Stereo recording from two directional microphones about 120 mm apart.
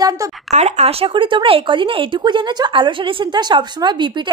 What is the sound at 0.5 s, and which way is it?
Speech, 65° right (ahead or behind).